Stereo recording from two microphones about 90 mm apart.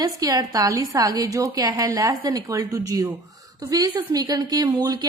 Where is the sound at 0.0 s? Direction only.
45° right (ahead or behind).